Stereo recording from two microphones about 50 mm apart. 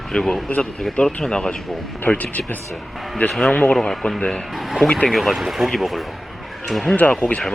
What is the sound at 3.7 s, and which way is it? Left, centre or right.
Speech, centre.